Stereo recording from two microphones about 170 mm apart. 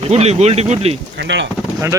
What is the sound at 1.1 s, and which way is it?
Speech, 85° right.